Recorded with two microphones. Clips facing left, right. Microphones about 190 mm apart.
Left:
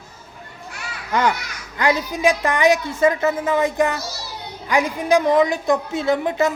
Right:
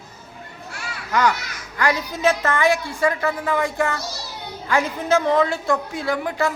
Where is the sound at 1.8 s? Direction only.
20° left (ahead or behind).